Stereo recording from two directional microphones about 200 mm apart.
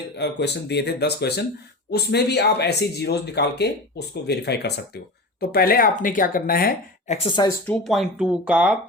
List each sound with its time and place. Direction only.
0.2 s speech: 60° left (ahead or behind)
7.1 s speech: 25° left (ahead or behind)
7.7 s speech: centre (ahead or behind)